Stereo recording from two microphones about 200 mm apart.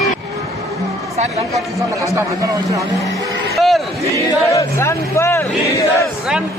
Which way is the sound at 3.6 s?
Centre (ahead or behind).